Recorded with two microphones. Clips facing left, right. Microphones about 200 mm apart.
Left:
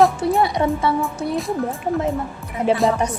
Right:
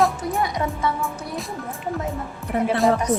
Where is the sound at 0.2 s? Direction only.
30° left (ahead or behind).